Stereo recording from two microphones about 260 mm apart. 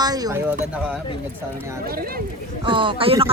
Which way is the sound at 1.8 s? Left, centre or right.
Right.